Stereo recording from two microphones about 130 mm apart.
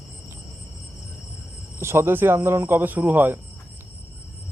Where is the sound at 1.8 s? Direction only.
20° right (ahead or behind).